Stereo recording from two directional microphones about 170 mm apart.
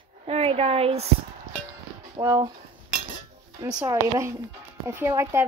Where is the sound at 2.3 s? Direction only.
25° right (ahead or behind).